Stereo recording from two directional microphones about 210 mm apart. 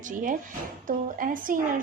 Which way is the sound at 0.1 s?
40° right (ahead or behind).